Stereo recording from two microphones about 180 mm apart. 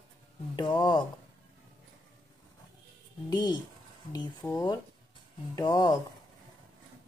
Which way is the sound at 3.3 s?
20° left (ahead or behind).